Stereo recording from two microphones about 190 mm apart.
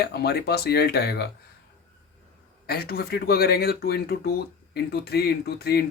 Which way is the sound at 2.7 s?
55° left (ahead or behind).